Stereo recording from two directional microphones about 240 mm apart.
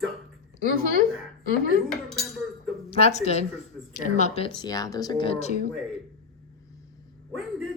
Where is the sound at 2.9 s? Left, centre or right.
Left.